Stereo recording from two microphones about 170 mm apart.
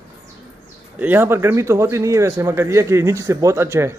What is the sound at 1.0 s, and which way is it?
A man's voice, 10° right (ahead or behind).